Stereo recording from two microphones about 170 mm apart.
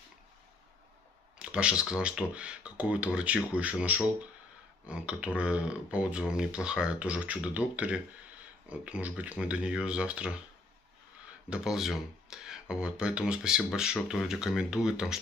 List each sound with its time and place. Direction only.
1.4 s speech: 5° right (ahead or behind)
11.5 s speech: 5° right (ahead or behind)